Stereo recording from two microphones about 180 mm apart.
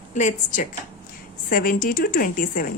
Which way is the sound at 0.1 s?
40° left (ahead or behind).